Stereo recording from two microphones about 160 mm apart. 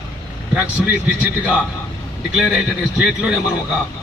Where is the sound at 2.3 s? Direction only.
Centre (ahead or behind).